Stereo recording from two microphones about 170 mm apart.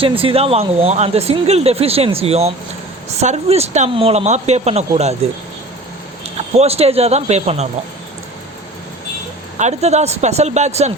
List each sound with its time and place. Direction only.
0.0 s speech: 30° right (ahead or behind)
9.6 s speech: 40° right (ahead or behind)